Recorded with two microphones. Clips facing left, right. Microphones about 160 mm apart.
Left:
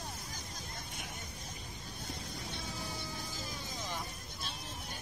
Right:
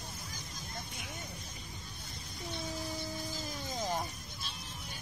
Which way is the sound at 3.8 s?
45° right (ahead or behind).